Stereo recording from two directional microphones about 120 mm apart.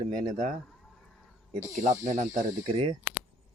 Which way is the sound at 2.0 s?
90° right.